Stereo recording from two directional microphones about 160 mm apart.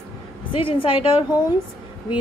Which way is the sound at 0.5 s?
35° left (ahead or behind).